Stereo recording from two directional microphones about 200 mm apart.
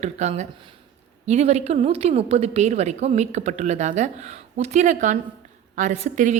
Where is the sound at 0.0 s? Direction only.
35° right (ahead or behind).